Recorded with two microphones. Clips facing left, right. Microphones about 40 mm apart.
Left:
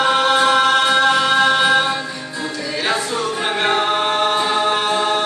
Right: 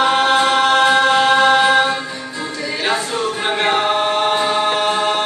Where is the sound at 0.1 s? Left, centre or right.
Right.